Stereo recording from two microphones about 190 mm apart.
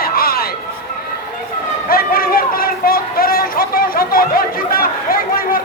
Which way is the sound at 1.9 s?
50° left (ahead or behind).